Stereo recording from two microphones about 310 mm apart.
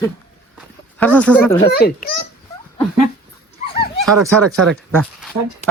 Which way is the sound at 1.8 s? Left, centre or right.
Left.